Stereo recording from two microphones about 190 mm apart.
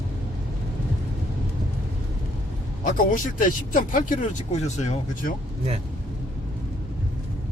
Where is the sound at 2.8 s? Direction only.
45° left (ahead or behind).